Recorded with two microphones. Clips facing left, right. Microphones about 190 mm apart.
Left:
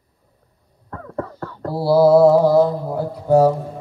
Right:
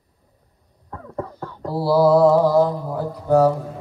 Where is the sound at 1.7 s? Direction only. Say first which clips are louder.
Left 3 dB; 10° left (ahead or behind).